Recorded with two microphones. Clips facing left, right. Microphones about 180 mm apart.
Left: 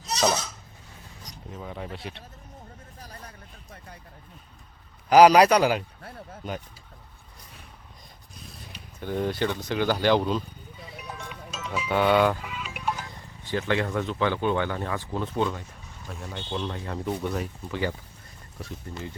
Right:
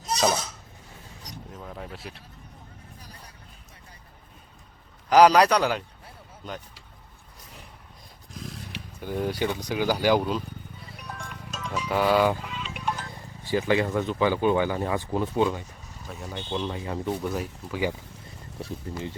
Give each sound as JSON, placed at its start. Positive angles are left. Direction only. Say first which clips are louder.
{"t": 1.5, "sound": "speech", "louder": "left 4 dB", "side_deg": 5}
{"t": 5.0, "sound": "speech", "louder": "left 2 dB", "side_deg": 10}
{"t": 8.3, "sound": "roaring cats", "louder": "right 8 dB", "side_deg": -90}
{"t": 9.0, "sound": "speech", "louder": "left 1 dB", "side_deg": -5}
{"t": 10.9, "sound": "music", "louder": "left 1 dB", "side_deg": 5}
{"t": 12.5, "sound": "music", "louder": "even", "side_deg": 5}
{"t": 13.1, "sound": "speech", "louder": "right 4 dB", "side_deg": -10}
{"t": 18.6, "sound": "speech", "louder": "right 3 dB", "side_deg": -25}